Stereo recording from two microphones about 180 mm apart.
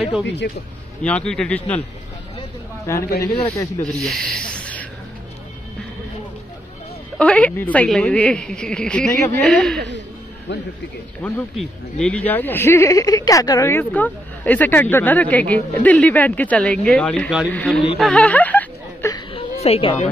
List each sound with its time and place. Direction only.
1.0 s speech: 5° left (ahead or behind)
2.9 s speech: 15° left (ahead or behind)
4.0 s speech: 5° left (ahead or behind)
7.2 s a woman's voice: 5° left (ahead or behind)
10.5 s speech: 75° left (ahead or behind)
11.5 s a woman's voice: 5° left (ahead or behind)
17.9 s a sound: 5° left (ahead or behind)
19.0 s a sound: 25° left (ahead or behind)
19.6 s a woman's voice: 30° left (ahead or behind)